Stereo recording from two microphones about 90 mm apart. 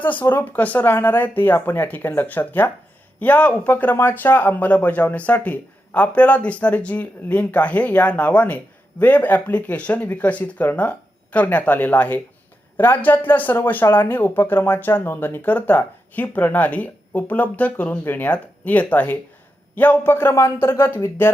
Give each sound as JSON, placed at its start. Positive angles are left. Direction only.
{"t": 0.0, "sound": "speech", "side_deg": 20}